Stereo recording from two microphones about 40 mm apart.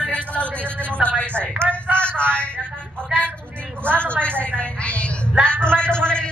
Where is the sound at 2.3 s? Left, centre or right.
Left.